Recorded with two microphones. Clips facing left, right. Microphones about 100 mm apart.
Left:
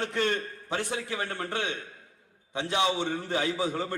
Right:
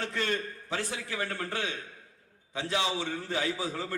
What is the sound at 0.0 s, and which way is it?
A man's voice, 20° left (ahead or behind).